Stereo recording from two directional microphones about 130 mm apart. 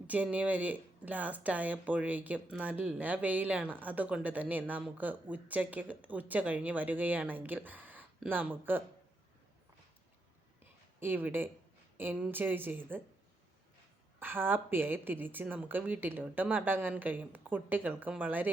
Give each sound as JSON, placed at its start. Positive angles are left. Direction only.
{"t": 0.1, "sound": "speech", "side_deg": -10}
{"t": 11.0, "sound": "speech", "side_deg": -15}
{"t": 14.2, "sound": "speech", "side_deg": -15}